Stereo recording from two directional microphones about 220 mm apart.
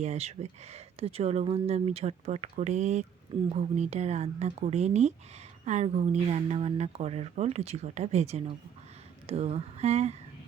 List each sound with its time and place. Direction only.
0.0 s speech: 30° right (ahead or behind)